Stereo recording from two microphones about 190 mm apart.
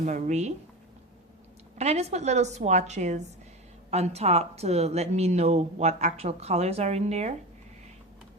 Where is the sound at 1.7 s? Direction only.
35° right (ahead or behind).